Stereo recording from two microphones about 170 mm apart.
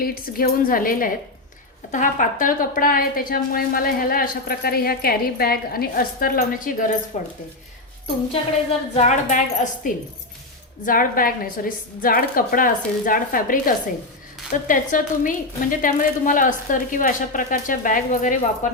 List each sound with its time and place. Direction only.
0.0 s a woman's voice: 60° left (ahead or behind)
9.0 s a woman's voice: 40° left (ahead or behind)